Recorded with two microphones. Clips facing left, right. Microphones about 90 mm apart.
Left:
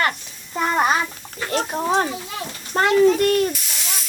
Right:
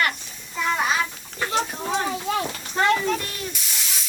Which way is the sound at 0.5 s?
50° left (ahead or behind).